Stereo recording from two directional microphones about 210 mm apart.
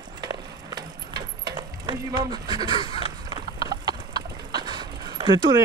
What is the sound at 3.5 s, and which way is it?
Clip-clop, 20° right (ahead or behind).